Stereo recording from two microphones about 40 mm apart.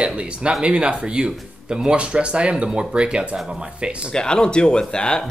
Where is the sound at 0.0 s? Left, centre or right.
Right.